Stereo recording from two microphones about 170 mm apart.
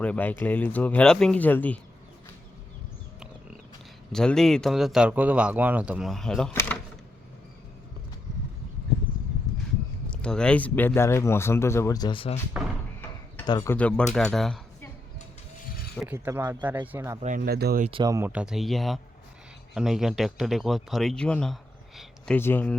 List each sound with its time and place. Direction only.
0.0 s speech: 10° left (ahead or behind)
4.1 s speech: 5° left (ahead or behind)
6.5 s speech: 15° left (ahead or behind)
10.1 s speech: 5° left (ahead or behind); by 12.4 s 30° left (ahead or behind)
13.4 s speech: 25° left (ahead or behind)
13.7 s speech: 5° left (ahead or behind)
16.1 s speech: 20° right (ahead or behind)
17.2 s speech: 50° right (ahead or behind); by 17.8 s 65° right (ahead or behind)
18.0 s speech: 20° right (ahead or behind)
18.3 s speech: 5° right (ahead or behind)
22.4 s speech: 10° left (ahead or behind)